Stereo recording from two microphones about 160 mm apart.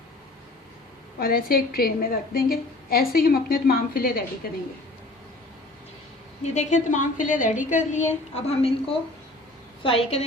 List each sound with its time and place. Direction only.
1.2 s a woman's voice: 65° left (ahead or behind)
6.4 s a woman's voice: 45° left (ahead or behind)
8.4 s a woman's voice: 40° left (ahead or behind)